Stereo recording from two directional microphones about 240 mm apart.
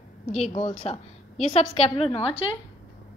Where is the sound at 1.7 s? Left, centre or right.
Left.